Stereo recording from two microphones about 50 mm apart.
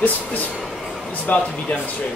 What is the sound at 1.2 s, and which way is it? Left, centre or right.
Speech, left.